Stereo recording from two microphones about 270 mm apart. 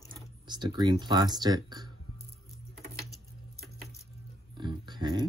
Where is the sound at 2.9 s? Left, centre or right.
Centre.